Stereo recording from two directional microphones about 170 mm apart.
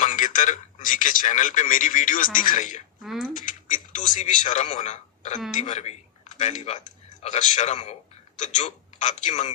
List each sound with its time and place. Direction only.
0.0 s a man's voice: 50° left (ahead or behind)
3.0 s speech: centre (ahead or behind)
3.3 s a man's voice: 50° left (ahead or behind)
5.5 s a sound: 45° left (ahead or behind)
6.4 s a man's voice: 45° left (ahead or behind)